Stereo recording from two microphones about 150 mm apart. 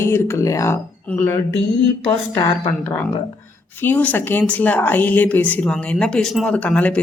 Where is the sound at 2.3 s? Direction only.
25° left (ahead or behind).